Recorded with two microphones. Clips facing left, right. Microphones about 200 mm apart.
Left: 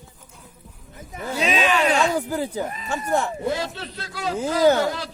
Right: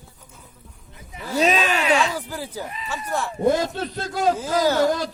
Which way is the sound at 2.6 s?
45° left (ahead or behind).